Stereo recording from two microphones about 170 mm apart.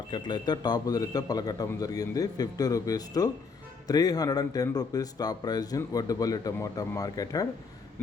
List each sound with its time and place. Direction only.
0.1 s speech: 25° left (ahead or behind)